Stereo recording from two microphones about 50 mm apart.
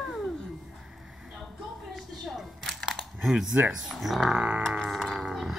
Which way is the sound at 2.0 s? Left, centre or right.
Centre.